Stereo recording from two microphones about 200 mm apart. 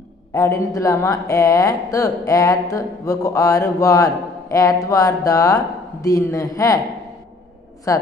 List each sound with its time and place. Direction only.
0.3 s speech: 15° left (ahead or behind)
7.9 s speech: 15° left (ahead or behind)